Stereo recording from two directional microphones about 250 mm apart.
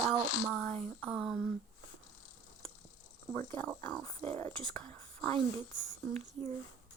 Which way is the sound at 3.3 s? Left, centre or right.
Centre.